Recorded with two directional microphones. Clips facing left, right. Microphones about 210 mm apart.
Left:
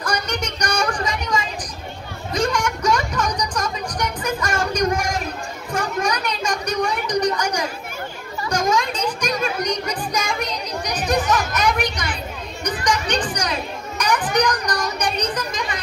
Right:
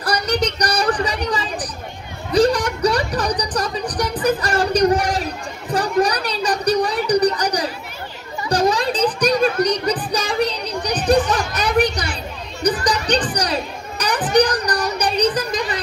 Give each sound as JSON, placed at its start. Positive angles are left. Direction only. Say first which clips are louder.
{"t": 0.0, "sound": "music", "louder": "right 5 dB", "side_deg": -35}
{"t": 8.5, "sound": "a sound", "louder": "right 3 dB", "side_deg": -35}
{"t": 11.1, "sound": "children playing", "louder": "right 4 dB", "side_deg": -35}